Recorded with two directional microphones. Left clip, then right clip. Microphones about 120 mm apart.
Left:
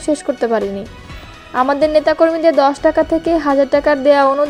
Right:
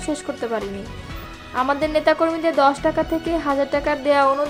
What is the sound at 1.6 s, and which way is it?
Speech, 40° left (ahead or behind).